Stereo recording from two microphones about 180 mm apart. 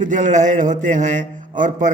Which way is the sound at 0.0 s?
45° right (ahead or behind).